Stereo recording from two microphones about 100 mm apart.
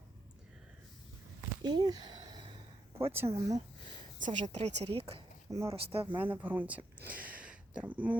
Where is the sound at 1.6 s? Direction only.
45° right (ahead or behind).